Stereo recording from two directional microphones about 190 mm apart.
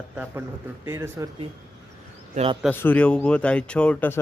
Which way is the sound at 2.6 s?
10° left (ahead or behind).